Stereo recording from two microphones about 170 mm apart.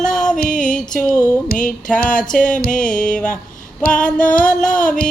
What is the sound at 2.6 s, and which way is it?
Music, 50° left (ahead or behind).